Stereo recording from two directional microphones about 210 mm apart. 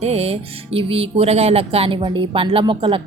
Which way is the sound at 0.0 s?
30° right (ahead or behind).